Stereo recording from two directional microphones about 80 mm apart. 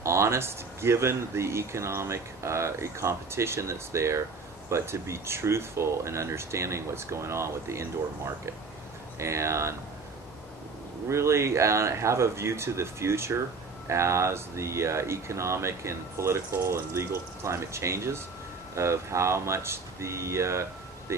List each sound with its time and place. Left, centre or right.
0.0 s speech: right
11.1 s speech: right